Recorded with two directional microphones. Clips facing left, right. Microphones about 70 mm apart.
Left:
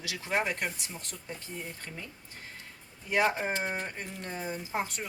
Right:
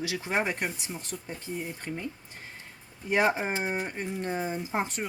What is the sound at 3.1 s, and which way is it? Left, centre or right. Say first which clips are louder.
Speech: right 2 dB; right.